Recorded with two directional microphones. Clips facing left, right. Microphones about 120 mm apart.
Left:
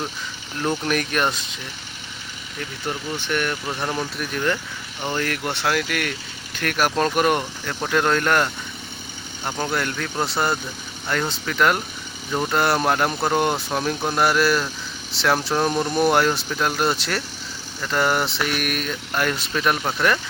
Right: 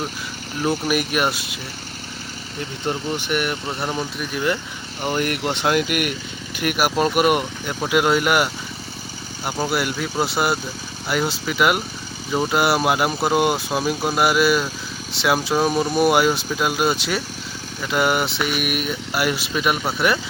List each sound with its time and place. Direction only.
0.6 s speech: 10° right (ahead or behind)
2.6 s speech: 25° right (ahead or behind)
3.2 s speech: 15° right (ahead or behind)